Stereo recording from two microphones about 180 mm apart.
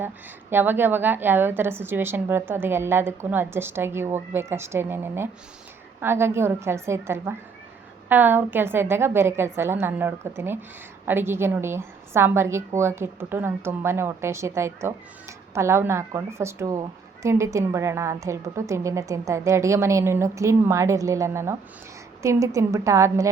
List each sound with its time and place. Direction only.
0.5 s a woman's voice: 10° right (ahead or behind)